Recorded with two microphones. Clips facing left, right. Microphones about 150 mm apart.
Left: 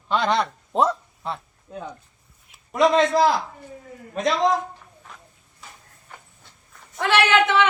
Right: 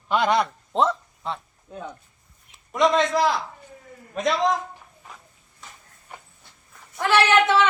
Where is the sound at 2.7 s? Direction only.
5° left (ahead or behind).